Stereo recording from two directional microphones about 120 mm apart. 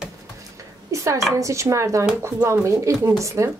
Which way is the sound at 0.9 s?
25° right (ahead or behind).